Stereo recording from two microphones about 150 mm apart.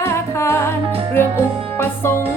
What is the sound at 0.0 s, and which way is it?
Music, 20° left (ahead or behind).